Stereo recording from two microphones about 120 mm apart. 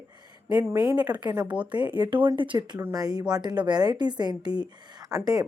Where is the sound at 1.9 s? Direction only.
40° right (ahead or behind).